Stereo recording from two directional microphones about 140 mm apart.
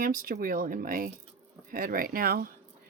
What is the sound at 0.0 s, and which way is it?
Speech, 85° right.